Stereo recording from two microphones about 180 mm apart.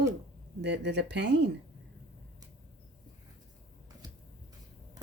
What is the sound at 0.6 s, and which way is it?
Speech, 70° right (ahead or behind).